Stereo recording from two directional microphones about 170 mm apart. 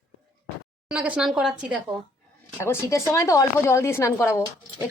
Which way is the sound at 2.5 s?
15° left (ahead or behind).